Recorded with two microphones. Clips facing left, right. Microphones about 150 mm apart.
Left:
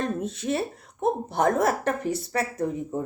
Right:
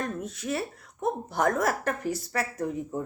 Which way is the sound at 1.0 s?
25° left (ahead or behind).